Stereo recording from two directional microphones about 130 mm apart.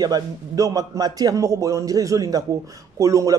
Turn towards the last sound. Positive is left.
turn(degrees=-25)  # may be behind; listen again after turning